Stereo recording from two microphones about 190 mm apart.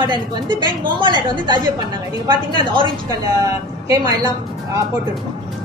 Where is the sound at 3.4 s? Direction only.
20° right (ahead or behind).